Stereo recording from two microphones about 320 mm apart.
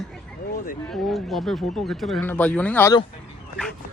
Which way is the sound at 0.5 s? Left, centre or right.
Left.